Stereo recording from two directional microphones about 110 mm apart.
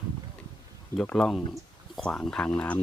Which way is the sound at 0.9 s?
5° left (ahead or behind).